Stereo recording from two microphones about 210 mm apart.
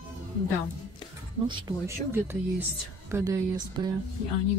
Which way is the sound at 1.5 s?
15° right (ahead or behind).